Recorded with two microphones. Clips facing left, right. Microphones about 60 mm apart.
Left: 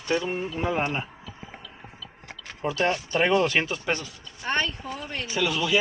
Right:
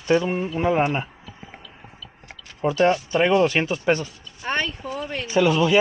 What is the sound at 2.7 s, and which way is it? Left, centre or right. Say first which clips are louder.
Speech: right 6 dB; right.